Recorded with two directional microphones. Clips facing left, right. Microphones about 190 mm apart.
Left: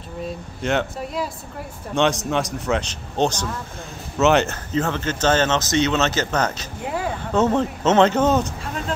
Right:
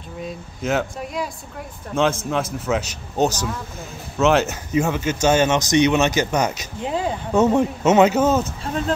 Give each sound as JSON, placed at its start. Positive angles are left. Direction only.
{"t": 0.2, "sound": "a man's voice", "side_deg": 0}
{"t": 6.8, "sound": "a sound", "side_deg": -20}
{"t": 7.3, "sound": "speech", "side_deg": -10}